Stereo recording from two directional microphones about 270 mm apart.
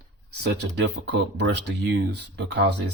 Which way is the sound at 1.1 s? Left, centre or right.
Right.